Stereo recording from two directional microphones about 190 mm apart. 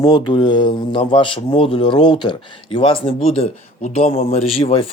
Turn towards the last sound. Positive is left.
turn(degrees=30)  # may be behind; listen again after turning